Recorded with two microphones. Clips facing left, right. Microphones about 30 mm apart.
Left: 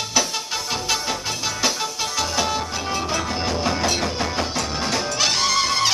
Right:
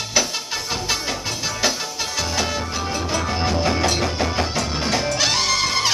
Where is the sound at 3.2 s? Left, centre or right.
Centre.